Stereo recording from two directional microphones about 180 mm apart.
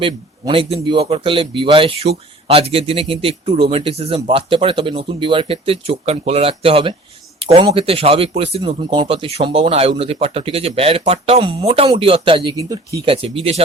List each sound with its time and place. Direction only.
0.0 s speech: 30° right (ahead or behind)
13.0 s speech: 30° right (ahead or behind)